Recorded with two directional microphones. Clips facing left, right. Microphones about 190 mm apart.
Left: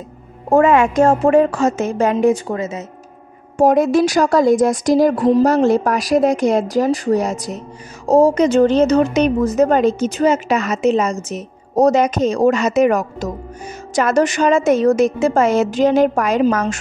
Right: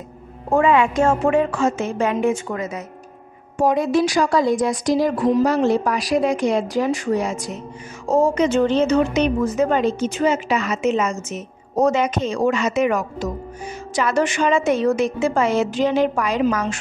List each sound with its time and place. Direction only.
0.5 s a woman's voice: 45° left (ahead or behind); by 2.8 s 30° left (ahead or behind)
3.5 s a woman's voice: 45° left (ahead or behind)